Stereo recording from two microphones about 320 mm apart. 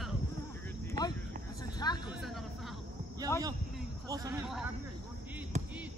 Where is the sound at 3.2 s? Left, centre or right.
Centre.